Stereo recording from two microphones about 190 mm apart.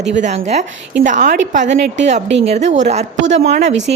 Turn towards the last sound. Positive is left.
turn(degrees=-40)  # may be behind; listen again after turning